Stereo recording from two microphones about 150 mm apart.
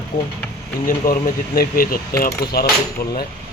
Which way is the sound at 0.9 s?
65° left (ahead or behind).